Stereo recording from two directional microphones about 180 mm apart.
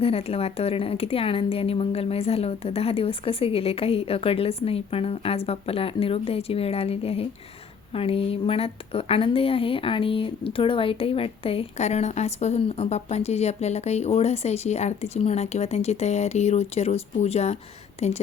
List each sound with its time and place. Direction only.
0.0 s a woman's voice: 35° left (ahead or behind)